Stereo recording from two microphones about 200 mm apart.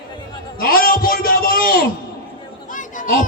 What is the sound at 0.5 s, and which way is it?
A man's voice, 45° left (ahead or behind).